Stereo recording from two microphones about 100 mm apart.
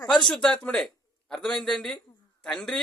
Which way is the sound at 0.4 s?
10° left (ahead or behind).